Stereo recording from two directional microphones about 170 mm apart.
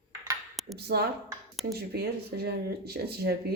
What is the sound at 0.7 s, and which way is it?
Speech, 70° right (ahead or behind).